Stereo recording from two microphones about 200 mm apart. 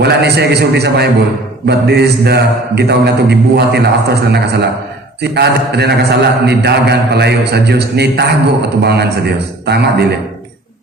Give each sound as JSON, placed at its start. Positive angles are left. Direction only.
{"t": 0.0, "sound": "a man's voice", "side_deg": -55}